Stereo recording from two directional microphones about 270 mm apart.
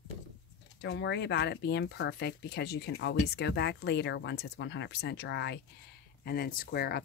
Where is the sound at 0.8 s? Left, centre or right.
Left.